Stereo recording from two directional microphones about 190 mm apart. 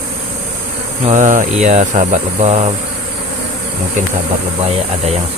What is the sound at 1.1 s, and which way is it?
Speech, 40° right (ahead or behind).